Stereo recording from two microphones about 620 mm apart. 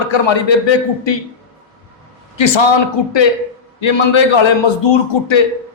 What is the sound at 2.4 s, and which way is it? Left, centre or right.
A man's voice, left.